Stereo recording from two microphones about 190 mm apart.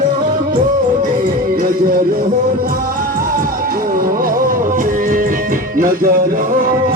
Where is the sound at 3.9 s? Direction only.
50° right (ahead or behind).